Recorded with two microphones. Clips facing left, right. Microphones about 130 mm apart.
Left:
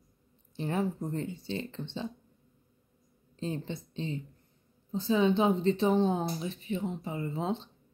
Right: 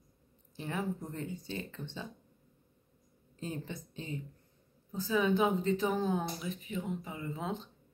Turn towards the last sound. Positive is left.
turn(degrees=30)  # may be behind; listen again after turning